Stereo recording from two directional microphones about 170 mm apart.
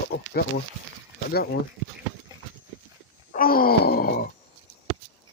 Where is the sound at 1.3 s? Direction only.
70° left (ahead or behind).